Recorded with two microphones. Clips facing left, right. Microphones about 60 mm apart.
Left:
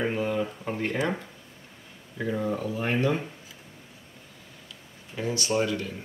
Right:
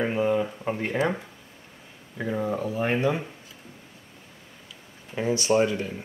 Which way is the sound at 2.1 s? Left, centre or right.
Centre.